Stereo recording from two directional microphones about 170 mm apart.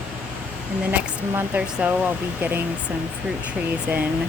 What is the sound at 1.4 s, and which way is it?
Speech, 10° right (ahead or behind).